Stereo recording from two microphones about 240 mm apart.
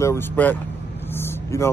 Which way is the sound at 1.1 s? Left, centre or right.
Centre.